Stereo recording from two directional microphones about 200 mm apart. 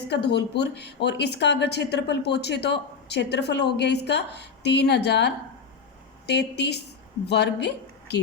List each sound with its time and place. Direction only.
0.1 s a woman's voice: 55° left (ahead or behind)